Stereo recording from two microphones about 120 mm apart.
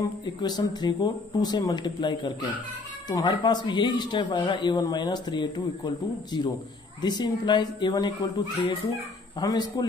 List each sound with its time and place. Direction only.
0.2 s speech: 35° left (ahead or behind)